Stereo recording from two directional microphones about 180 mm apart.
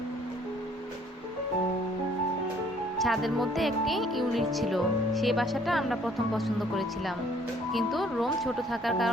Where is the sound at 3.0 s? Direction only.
Centre (ahead or behind).